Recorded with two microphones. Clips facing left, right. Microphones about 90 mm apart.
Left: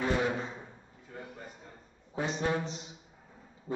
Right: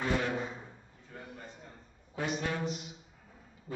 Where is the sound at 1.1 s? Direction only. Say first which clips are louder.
Left 2 dB; 10° left (ahead or behind).